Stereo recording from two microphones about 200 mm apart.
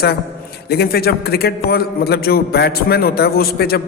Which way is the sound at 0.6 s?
50° left (ahead or behind).